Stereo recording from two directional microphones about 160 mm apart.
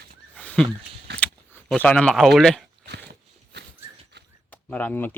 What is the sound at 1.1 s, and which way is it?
Keys jangling, 90° right.